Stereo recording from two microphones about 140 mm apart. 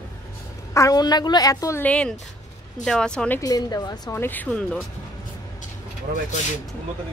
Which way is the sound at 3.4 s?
25° left (ahead or behind).